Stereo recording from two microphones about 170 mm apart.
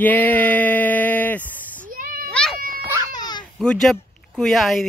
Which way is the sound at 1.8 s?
55° right (ahead or behind).